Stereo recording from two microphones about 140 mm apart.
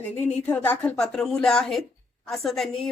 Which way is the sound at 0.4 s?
10° left (ahead or behind).